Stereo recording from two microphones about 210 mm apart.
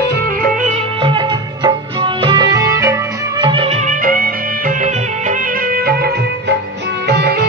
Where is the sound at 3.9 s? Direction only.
40° right (ahead or behind).